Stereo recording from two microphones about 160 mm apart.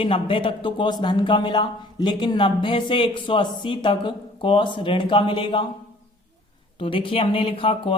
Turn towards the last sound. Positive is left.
turn(degrees=35)  # may be behind; listen again after turning